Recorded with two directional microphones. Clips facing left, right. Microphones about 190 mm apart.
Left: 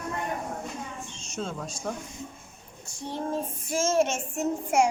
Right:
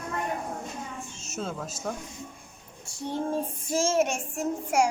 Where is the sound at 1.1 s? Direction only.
5° right (ahead or behind).